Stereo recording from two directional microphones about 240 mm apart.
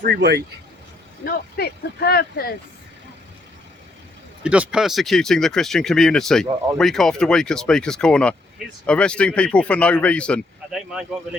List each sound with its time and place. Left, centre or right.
0.0 s speech: right
1.2 s speech: left
4.4 s speech: centre